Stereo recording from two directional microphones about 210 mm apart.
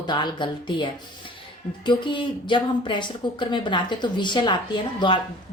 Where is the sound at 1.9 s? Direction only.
25° left (ahead or behind).